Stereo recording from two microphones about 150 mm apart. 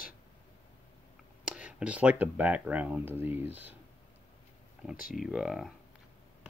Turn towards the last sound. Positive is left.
turn(degrees=-5)  # may be behind; listen again after turning